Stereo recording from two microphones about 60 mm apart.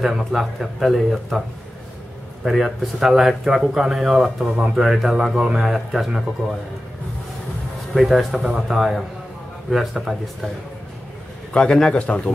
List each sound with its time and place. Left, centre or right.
0.0 s speech: centre
2.4 s speech: centre
7.9 s speech: centre
11.5 s a man's voice: centre